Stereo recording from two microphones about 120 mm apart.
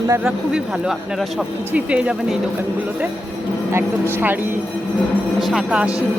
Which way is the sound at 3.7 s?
15° right (ahead or behind).